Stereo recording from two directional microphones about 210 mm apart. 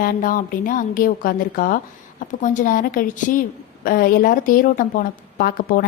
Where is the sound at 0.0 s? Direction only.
40° left (ahead or behind).